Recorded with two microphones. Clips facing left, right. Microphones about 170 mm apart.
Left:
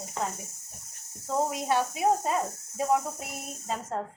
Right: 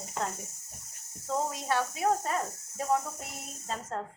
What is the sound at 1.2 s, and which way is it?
Speech, 15° left (ahead or behind).